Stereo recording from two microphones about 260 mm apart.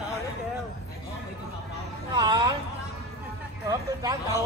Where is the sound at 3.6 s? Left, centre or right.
Centre.